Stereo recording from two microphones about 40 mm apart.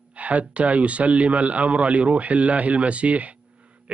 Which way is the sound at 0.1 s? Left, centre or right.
Right.